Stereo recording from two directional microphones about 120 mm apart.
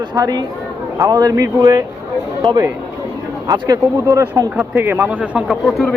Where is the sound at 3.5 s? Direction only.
30° right (ahead or behind).